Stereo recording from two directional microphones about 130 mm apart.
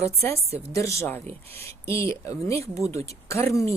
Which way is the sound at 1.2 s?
55° right (ahead or behind).